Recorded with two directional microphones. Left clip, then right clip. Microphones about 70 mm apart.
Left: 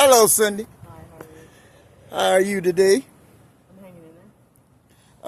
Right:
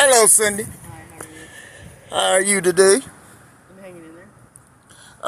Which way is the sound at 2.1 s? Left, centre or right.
Left.